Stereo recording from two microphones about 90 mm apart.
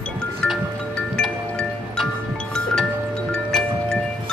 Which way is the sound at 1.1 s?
5° left (ahead or behind).